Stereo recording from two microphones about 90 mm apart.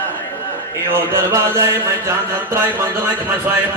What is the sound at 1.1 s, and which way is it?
Mantra, 30° right (ahead or behind).